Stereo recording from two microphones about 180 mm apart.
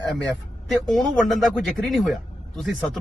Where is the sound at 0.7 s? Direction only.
Centre (ahead or behind).